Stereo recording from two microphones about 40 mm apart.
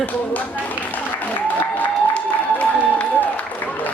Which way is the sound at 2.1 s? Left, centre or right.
Left.